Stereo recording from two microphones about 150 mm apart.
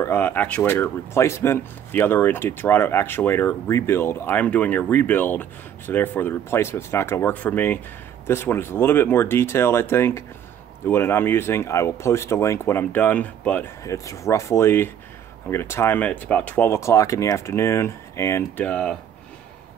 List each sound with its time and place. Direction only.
0.0 s speech: 15° left (ahead or behind)
13.8 s speech: 20° left (ahead or behind)